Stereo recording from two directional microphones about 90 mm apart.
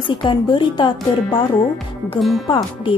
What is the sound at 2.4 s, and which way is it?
Speech, 70° left (ahead or behind).